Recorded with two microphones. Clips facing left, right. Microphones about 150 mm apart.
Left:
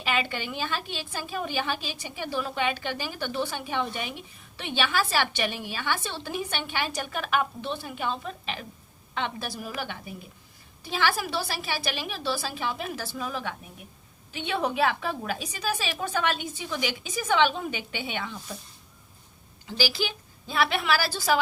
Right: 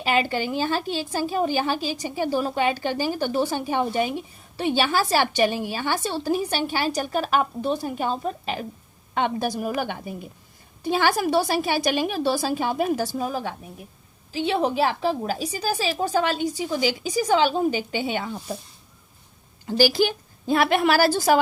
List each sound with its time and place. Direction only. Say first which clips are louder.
0.0 s a woman's voice: right 6 dB; 40° right (ahead or behind)
19.6 s a woman's voice: right 9 dB; 45° right (ahead or behind)